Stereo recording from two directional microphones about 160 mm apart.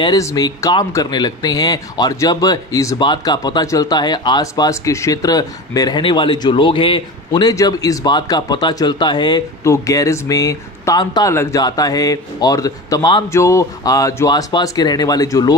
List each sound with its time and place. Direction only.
0.0 s speech: 20° left (ahead or behind)